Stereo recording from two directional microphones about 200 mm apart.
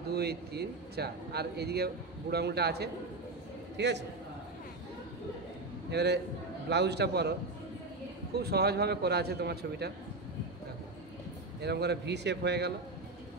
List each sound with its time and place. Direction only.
0.1 s a man's voice: 55° right (ahead or behind)
5.9 s a man's voice: 55° right (ahead or behind)
8.4 s a man's voice: 55° right (ahead or behind)
11.6 s speech: 55° right (ahead or behind)